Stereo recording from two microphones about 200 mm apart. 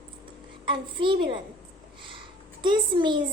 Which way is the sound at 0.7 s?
25° right (ahead or behind).